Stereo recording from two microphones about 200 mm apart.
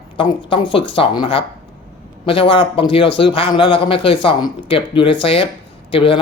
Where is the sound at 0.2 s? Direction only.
25° left (ahead or behind).